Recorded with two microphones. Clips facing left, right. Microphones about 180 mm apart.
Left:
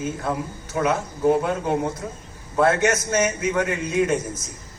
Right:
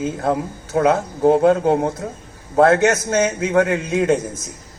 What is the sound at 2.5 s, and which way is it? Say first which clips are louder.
A man's voice: right 5 dB; 70° right (ahead or behind).